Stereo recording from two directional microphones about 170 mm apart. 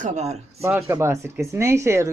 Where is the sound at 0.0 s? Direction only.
40° right (ahead or behind).